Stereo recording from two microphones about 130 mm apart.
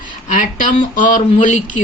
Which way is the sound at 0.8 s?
90° left.